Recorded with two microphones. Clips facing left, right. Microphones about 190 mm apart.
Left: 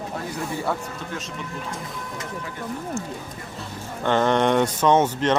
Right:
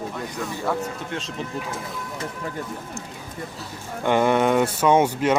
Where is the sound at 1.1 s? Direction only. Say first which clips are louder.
Right 2 dB; 30° right (ahead or behind).